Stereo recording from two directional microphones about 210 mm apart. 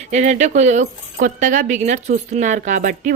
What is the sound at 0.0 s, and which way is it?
Speech, 35° right (ahead or behind).